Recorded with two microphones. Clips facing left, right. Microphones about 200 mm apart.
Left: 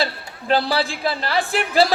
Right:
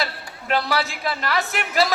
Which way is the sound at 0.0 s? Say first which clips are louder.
Left 4 dB; 30° left (ahead or behind).